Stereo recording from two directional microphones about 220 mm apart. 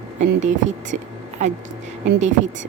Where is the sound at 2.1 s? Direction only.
35° right (ahead or behind).